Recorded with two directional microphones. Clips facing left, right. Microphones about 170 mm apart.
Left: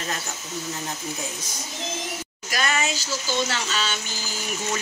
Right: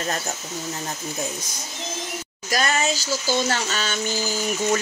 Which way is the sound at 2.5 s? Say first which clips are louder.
Right 3 dB; 40° right (ahead or behind).